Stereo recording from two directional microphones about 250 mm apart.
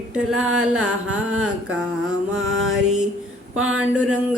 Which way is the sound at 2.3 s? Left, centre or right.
Right.